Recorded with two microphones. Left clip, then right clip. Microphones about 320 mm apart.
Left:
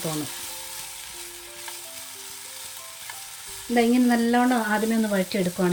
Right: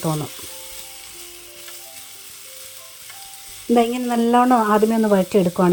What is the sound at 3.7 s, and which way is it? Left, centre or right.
Frying, centre.